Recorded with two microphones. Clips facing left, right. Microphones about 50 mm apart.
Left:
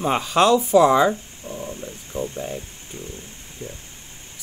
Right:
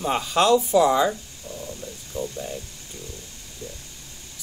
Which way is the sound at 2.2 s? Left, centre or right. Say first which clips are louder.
Left 2 dB; left.